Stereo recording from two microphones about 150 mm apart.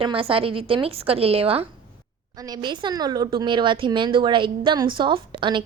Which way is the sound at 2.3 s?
25° right (ahead or behind).